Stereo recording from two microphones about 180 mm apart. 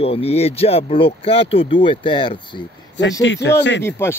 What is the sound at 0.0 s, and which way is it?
Speech, 35° left (ahead or behind).